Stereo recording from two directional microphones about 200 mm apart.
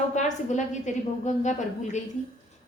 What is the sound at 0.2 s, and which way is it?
A woman's voice, 35° left (ahead or behind).